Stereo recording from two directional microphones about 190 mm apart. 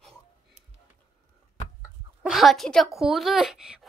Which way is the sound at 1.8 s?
Centre (ahead or behind).